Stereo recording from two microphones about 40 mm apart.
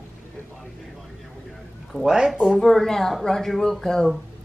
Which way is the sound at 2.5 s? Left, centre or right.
Centre.